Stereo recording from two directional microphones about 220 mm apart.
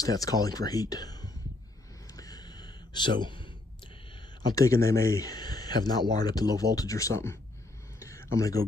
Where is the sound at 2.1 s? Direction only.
15° left (ahead or behind).